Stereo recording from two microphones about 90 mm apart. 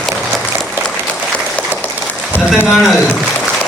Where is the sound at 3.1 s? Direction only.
Centre (ahead or behind).